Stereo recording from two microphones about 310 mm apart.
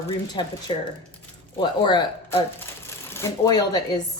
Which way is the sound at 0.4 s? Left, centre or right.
Centre.